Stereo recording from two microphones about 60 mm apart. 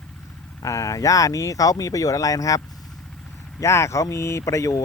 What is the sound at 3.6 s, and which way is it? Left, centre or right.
Speech, left.